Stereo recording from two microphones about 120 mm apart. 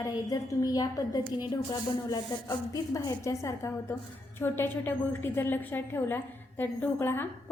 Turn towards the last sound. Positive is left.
turn(degrees=15)  # may be behind; listen again after turning